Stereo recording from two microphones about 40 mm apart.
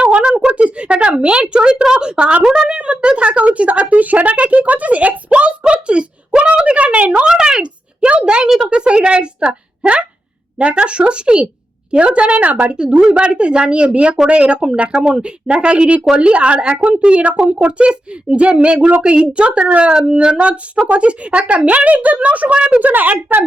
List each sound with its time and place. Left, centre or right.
0.0 s a sound: right
1.1 s a woman's voice: right
7.1 s speech: centre
7.6 s speech: right
8.4 s speech: centre
8.7 s a woman's voice: right
12.7 s a woman's voice: right
22.9 s speech: right